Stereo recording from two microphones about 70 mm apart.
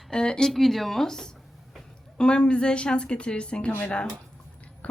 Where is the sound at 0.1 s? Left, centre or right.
Centre.